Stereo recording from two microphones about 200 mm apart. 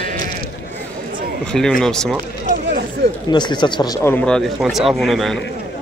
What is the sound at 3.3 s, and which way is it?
Speech, 20° left (ahead or behind).